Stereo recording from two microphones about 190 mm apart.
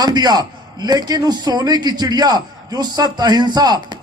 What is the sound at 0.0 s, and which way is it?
A man's voice, 20° right (ahead or behind).